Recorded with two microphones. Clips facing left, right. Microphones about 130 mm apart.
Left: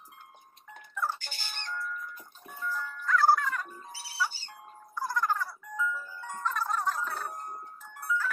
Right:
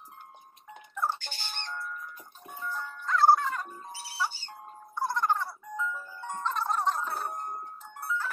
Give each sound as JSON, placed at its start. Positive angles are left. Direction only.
{"t": 0.7, "sound": "music", "side_deg": -20}